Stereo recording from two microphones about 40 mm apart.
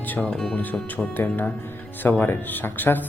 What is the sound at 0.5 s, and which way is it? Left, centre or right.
Speech, left.